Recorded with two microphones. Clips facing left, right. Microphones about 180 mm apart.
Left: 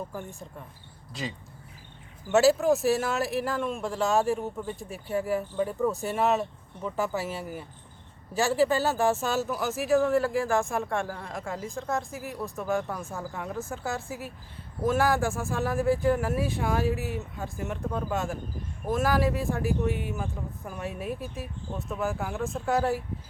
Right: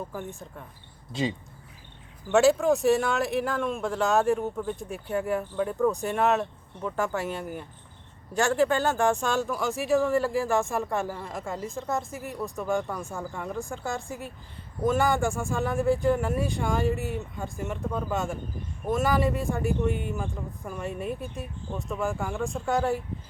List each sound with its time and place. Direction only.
0.1 s speech: centre (ahead or behind)
2.3 s speech: centre (ahead or behind)